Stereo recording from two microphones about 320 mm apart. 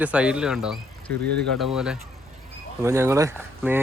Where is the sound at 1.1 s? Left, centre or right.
Right.